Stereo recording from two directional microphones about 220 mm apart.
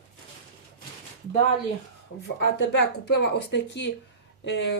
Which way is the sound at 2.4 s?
50° left (ahead or behind).